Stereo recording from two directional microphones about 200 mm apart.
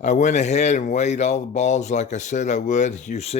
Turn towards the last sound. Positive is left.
turn(degrees=30)  # may be behind; listen again after turning